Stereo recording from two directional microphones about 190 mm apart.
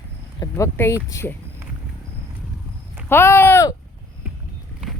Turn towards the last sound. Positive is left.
turn(degrees=15)  # may be behind; listen again after turning